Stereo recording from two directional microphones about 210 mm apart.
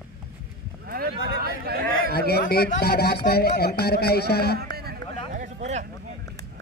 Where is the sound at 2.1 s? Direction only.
50° left (ahead or behind).